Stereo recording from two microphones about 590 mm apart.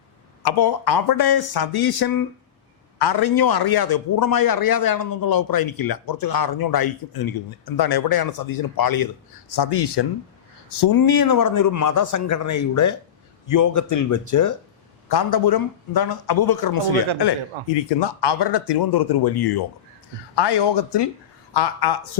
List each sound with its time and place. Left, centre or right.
0.4 s a man's voice: left
18.0 s a man's voice: left